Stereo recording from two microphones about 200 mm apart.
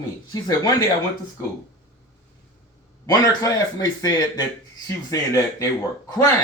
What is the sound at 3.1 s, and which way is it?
Speech, 20° left (ahead or behind).